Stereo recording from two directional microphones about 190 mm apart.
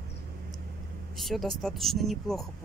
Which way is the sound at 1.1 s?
Centre (ahead or behind).